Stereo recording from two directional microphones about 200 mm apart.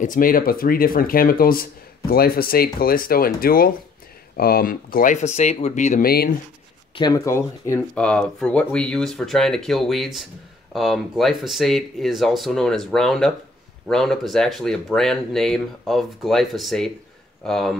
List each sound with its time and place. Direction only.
0.0 s speech: 45° left (ahead or behind)
7.0 s speech: 20° left (ahead or behind); by 17.7 s centre (ahead or behind)